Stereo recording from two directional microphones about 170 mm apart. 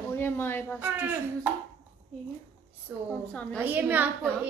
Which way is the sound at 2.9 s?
10° right (ahead or behind).